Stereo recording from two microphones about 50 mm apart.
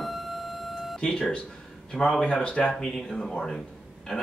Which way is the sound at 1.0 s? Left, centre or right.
Centre.